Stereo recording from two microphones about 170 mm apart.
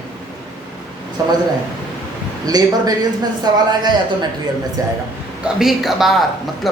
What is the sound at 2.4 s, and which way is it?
Speech, 20° right (ahead or behind).